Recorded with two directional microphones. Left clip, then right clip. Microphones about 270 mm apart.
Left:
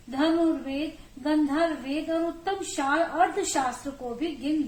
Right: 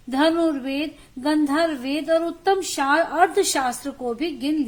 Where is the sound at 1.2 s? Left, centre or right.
Right.